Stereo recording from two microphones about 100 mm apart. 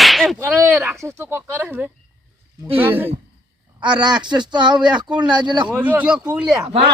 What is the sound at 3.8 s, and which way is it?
Speech, 50° right (ahead or behind).